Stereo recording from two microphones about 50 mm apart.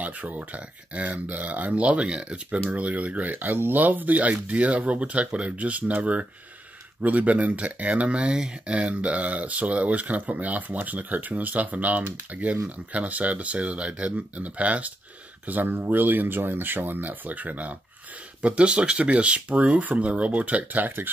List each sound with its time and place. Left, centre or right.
0.0 s speech: right